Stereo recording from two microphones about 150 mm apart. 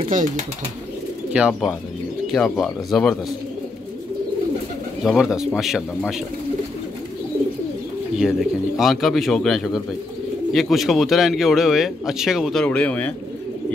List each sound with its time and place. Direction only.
0.1 s speech: 55° right (ahead or behind)
1.3 s speech: 5° right (ahead or behind)
5.0 s speech: 5° right (ahead or behind)
8.2 s speech: centre (ahead or behind)
12.6 s speech: 10° left (ahead or behind)